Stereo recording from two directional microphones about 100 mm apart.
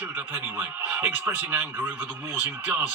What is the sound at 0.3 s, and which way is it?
A man's voice, 20° right (ahead or behind).